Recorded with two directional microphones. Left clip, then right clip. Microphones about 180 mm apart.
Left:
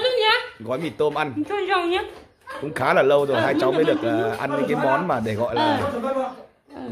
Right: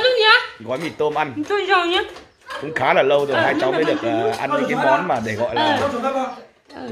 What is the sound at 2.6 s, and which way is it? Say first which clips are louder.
Speech: right 2 dB; 20° left (ahead or behind).